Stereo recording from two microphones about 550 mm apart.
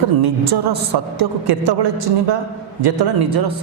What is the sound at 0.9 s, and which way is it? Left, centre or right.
A man's voice, right.